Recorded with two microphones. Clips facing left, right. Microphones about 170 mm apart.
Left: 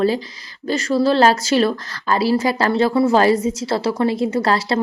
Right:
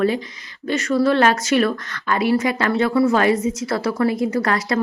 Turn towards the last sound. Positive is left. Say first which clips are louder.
# left 2 dB
turn(degrees=30)  # may be behind; listen again after turning